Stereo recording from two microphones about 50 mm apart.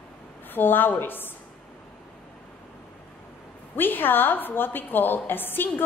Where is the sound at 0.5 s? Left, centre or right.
Left.